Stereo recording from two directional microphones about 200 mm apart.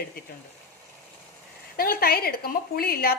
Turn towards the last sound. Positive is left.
turn(degrees=50)  # may be behind; listen again after turning